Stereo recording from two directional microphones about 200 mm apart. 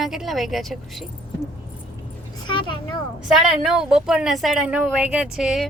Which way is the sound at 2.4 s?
25° left (ahead or behind).